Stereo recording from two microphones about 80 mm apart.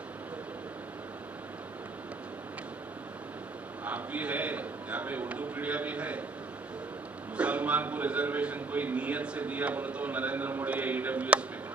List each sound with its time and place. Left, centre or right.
3.8 s a man's voice: centre
7.3 s a man's voice: centre